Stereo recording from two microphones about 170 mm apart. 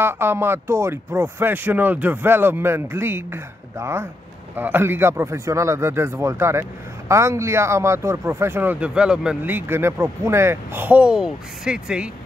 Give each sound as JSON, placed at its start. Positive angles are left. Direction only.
{"t": 0.0, "sound": "speech", "side_deg": -15}